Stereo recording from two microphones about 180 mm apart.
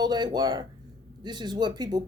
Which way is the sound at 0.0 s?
25° right (ahead or behind).